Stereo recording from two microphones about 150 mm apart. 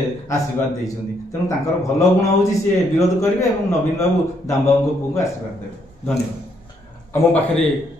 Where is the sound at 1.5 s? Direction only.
20° left (ahead or behind).